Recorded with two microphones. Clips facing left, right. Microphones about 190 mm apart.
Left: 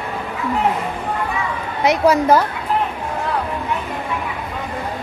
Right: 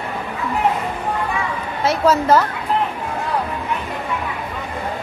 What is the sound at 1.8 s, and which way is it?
Speech, 15° left (ahead or behind).